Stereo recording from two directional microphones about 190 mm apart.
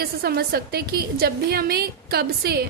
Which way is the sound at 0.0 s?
55° right (ahead or behind).